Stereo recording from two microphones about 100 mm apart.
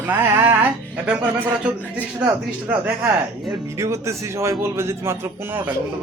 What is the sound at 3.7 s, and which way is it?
Speech, 30° right (ahead or behind).